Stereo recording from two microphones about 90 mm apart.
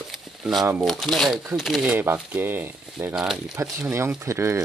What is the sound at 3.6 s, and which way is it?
Speech, 30° right (ahead or behind).